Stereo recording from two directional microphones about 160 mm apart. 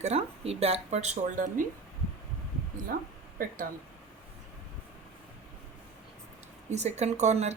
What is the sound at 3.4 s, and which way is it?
Speech, 65° right (ahead or behind).